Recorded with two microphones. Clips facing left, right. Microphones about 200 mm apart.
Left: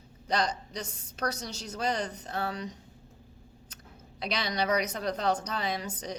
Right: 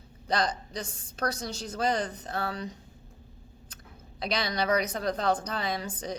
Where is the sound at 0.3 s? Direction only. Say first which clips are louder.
Right 1 dB; 35° right (ahead or behind).